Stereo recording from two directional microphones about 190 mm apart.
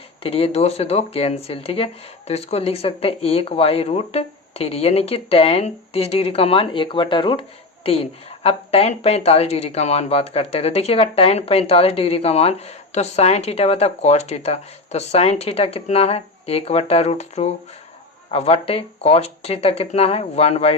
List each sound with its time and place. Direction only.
0.2 s speech: 30° left (ahead or behind)